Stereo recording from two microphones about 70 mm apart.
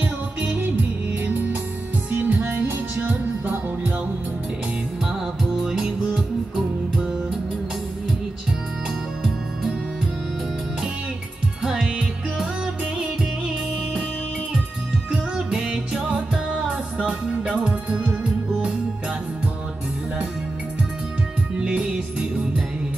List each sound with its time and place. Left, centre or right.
0.0 s music: right
2.0 s music: right
5.4 s music: centre
11.6 s music: centre
15.0 s music: centre
21.5 s music: centre